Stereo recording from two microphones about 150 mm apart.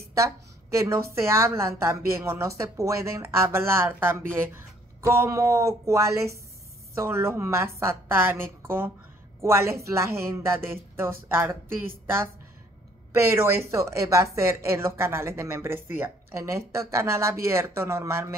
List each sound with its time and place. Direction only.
0.2 s a woman's voice: 20° right (ahead or behind)
5.0 s a sound: 20° right (ahead or behind)
7.0 s a woman's voice: 15° right (ahead or behind)
13.1 s a woman's voice: 15° right (ahead or behind)